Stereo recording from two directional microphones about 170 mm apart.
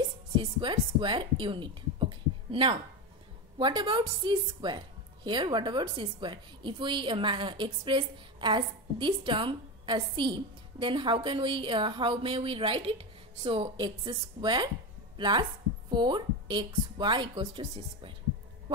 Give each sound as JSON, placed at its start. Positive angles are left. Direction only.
{"t": 0.4, "sound": "a woman's voice", "side_deg": -30}